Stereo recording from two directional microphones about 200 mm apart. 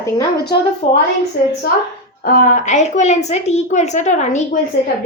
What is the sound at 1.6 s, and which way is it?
A woman's voice, 50° left (ahead or behind).